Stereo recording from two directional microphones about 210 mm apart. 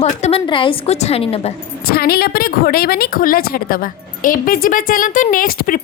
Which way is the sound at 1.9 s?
45° left (ahead or behind).